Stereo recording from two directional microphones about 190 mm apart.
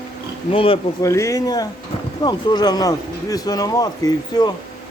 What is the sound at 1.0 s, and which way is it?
Speech, 15° left (ahead or behind).